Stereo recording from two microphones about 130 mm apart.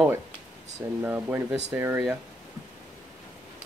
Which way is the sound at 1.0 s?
15° right (ahead or behind).